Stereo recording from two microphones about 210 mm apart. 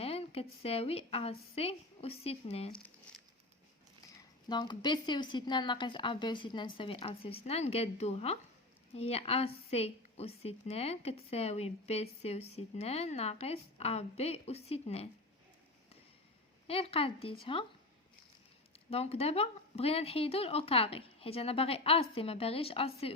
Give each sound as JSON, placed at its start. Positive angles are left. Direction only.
{"t": 0.0, "sound": "a woman's voice", "side_deg": 30}
{"t": 4.4, "sound": "a woman's voice", "side_deg": 20}
{"t": 16.6, "sound": "a woman's voice", "side_deg": 25}
{"t": 18.9, "sound": "a woman's voice", "side_deg": 30}